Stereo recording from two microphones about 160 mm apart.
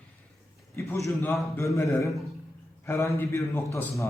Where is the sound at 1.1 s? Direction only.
20° left (ahead or behind).